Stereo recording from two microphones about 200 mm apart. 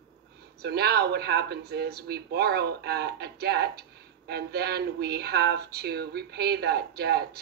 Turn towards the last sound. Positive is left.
turn(degrees=-55)  # may be behind; listen again after turning